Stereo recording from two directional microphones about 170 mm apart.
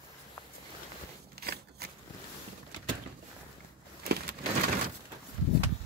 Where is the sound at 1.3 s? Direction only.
70° right (ahead or behind).